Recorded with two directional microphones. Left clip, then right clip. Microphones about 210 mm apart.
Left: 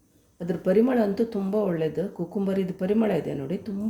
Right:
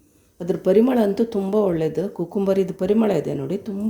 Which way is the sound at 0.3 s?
15° right (ahead or behind).